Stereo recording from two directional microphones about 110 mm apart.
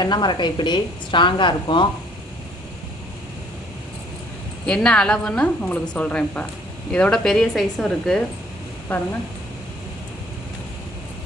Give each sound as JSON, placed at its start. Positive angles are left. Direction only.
{"t": 0.0, "sound": "a woman's voice", "side_deg": 40}
{"t": 4.6, "sound": "a woman's voice", "side_deg": 10}
{"t": 8.9, "sound": "a woman's voice", "side_deg": 15}